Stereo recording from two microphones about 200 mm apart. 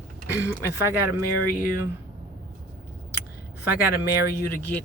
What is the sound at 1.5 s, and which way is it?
Speech, 45° left (ahead or behind).